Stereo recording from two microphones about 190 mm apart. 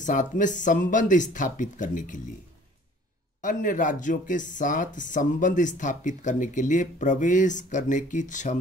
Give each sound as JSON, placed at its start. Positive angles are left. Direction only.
{"t": 0.0, "sound": "speech", "side_deg": 40}
{"t": 3.3, "sound": "speech", "side_deg": 45}